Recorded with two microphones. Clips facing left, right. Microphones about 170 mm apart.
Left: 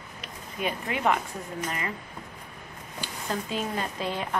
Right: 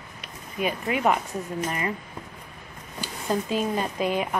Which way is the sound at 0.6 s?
15° right (ahead or behind).